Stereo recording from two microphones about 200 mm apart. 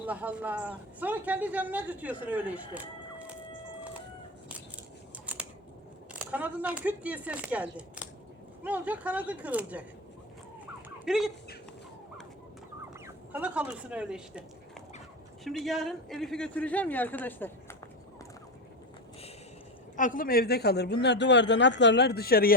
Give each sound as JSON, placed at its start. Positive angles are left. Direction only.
{"t": 0.0, "sound": "speech", "side_deg": -10}
{"t": 5.2, "sound": "scissors", "side_deg": -5}
{"t": 6.1, "sound": "speech", "side_deg": -5}
{"t": 10.8, "sound": "chicken", "side_deg": -5}
{"t": 13.3, "sound": "speech", "side_deg": -5}
{"t": 15.4, "sound": "a man's voice", "side_deg": 0}
{"t": 20.0, "sound": "a man's voice", "side_deg": 40}